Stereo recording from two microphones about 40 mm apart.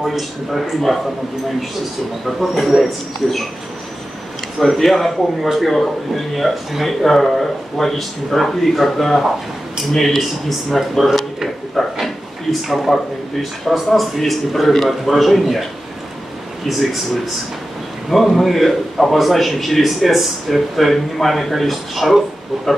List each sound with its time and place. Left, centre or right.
0.0 s a man's voice: centre
2.2 s a man's voice: centre
4.6 s a man's voice: centre
11.7 s a sound: centre
12.9 s a man's voice: centre
16.6 s a man's voice: centre